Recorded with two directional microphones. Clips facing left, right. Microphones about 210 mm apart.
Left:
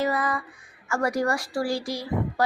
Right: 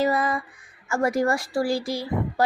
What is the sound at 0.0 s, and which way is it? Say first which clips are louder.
A woman's voice: right 3 dB; 30° right (ahead or behind).